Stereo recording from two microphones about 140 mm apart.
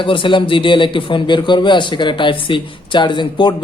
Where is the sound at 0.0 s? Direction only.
35° left (ahead or behind).